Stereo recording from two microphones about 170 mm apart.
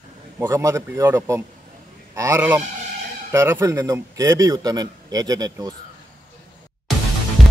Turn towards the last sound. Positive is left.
turn(degrees=0)  # may be behind; listen again after turning